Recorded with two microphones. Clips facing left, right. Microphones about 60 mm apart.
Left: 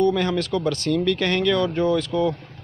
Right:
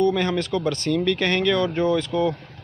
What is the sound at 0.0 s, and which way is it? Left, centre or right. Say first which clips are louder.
Speech: even; centre.